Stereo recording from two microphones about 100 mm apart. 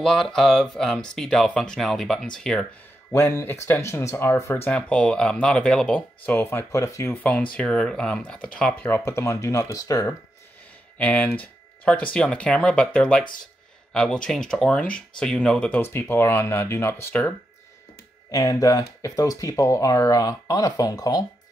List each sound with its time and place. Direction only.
0.0 s speech: 5° left (ahead or behind)
3.1 s speech: 25° left (ahead or behind)
4.7 s speech: 10° left (ahead or behind)
6.2 s speech: 20° left (ahead or behind)
7.5 s speech: 10° left (ahead or behind)
8.9 s speech: 25° left (ahead or behind)
11.0 s speech: 15° left (ahead or behind)
15.8 s speech: 25° left (ahead or behind)
18.3 s speech: 35° left (ahead or behind)